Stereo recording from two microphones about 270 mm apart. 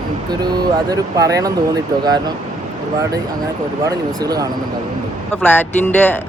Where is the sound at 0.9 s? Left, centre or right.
Centre.